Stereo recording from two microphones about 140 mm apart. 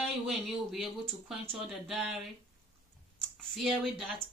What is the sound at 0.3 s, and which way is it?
A woman's voice, centre (ahead or behind).